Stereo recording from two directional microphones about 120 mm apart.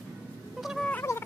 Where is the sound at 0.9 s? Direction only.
20° left (ahead or behind).